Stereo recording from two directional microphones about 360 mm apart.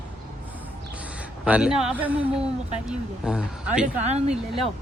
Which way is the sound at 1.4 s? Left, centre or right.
Centre.